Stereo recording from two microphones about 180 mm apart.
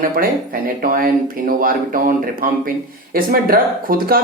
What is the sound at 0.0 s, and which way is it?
Speech, 55° right (ahead or behind).